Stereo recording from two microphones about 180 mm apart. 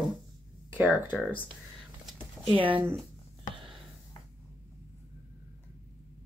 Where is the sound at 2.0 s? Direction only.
Centre (ahead or behind).